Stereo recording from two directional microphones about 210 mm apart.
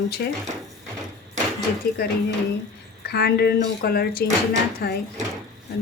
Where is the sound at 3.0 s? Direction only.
50° left (ahead or behind).